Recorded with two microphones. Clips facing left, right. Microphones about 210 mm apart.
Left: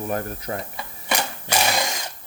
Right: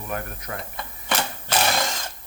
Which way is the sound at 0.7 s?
10° left (ahead or behind).